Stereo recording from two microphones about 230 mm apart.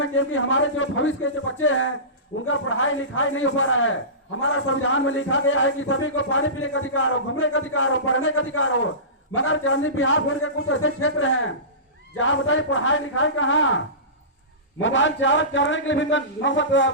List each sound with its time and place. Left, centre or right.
0.0 s a man's voice: left